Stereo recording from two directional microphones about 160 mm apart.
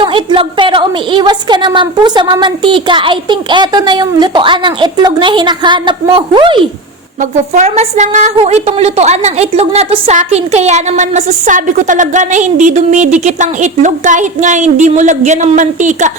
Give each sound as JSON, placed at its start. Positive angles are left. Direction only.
{"t": 0.0, "sound": "a woman's voice", "side_deg": -30}
{"t": 7.2, "sound": "a woman's voice", "side_deg": -50}